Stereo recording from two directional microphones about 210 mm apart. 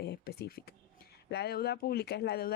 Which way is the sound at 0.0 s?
50° left (ahead or behind).